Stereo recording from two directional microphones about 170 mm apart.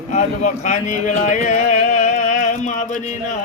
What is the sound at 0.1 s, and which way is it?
Speech, 45° left (ahead or behind).